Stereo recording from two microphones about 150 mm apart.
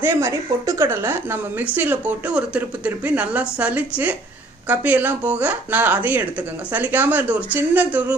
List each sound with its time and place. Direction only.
0.0 s speech: 20° right (ahead or behind)